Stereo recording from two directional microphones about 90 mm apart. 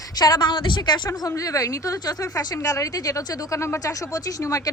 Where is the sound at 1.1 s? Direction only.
35° left (ahead or behind).